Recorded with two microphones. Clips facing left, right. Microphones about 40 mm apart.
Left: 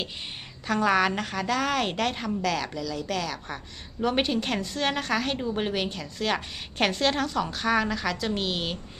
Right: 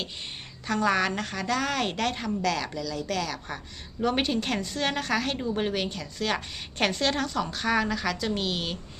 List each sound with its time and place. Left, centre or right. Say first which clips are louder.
0.7 s a woman's voice: left 2 dB; centre